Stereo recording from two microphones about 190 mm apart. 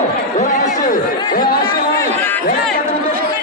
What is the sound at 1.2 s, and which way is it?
Chatter, 25° left (ahead or behind).